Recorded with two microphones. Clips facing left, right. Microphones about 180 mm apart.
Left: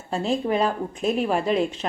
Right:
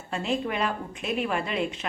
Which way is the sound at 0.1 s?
35° left (ahead or behind).